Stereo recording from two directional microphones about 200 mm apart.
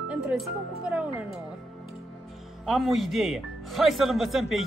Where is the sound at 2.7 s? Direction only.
Centre (ahead or behind).